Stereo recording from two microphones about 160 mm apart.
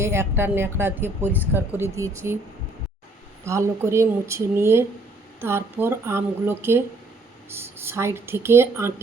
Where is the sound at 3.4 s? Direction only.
15° right (ahead or behind).